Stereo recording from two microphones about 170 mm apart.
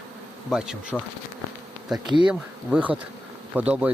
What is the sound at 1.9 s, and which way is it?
Bee, 25° right (ahead or behind).